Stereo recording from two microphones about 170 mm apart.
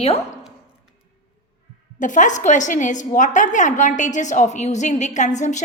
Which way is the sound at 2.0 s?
50° left (ahead or behind).